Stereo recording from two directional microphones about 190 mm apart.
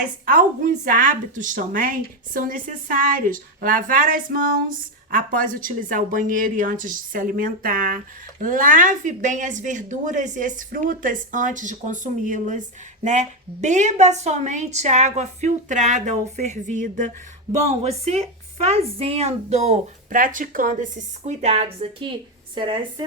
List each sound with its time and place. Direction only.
0.3 s a woman's voice: 45° right (ahead or behind); by 23.0 s 25° right (ahead or behind)